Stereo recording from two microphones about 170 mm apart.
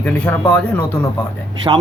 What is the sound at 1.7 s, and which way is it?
Speech, 20° right (ahead or behind).